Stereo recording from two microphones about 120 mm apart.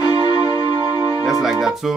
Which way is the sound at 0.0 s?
35° left (ahead or behind).